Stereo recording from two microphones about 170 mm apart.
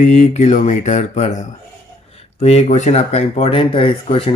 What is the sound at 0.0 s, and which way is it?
Mantra, 45° left (ahead or behind).